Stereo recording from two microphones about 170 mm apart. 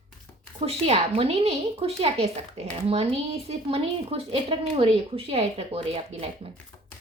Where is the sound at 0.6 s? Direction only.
35° right (ahead or behind).